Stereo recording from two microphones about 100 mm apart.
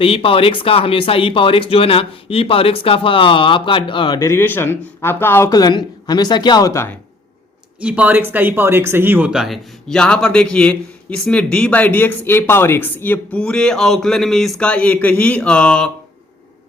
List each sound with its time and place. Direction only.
0.0 s speech: 70° left (ahead or behind)
4.2 s speech: 25° left (ahead or behind)
5.5 s speech: 40° left (ahead or behind)
7.8 s speech: 15° right (ahead or behind)
9.3 s a man's voice: 5° right (ahead or behind)
9.9 s a man's voice: 5° left (ahead or behind)